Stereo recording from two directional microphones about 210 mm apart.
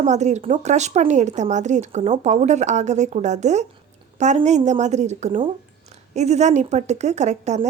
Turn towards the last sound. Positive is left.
turn(degrees=-35)  # may be behind; listen again after turning